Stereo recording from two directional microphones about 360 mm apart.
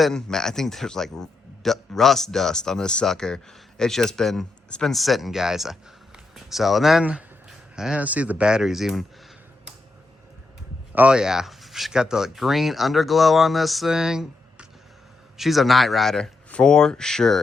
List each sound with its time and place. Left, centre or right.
0.0 s speech: centre
10.9 s speech: centre